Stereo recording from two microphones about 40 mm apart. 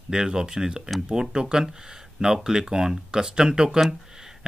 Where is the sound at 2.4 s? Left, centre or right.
Centre.